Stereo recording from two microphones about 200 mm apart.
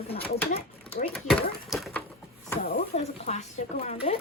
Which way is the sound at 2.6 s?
45° left (ahead or behind).